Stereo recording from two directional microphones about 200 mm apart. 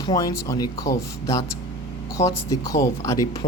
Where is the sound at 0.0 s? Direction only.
20° left (ahead or behind).